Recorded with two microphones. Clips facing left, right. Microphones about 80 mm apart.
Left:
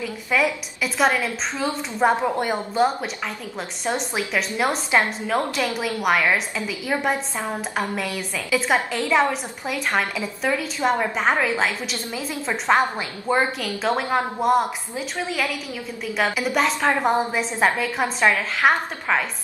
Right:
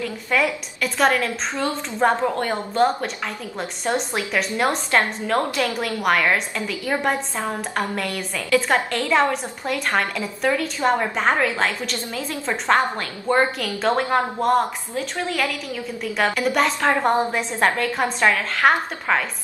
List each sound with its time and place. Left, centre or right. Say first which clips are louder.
0.0 s a woman's voice: even; centre
4.6 s a woman's voice: left 1 dB; centre
5.8 s a woman's voice: even; centre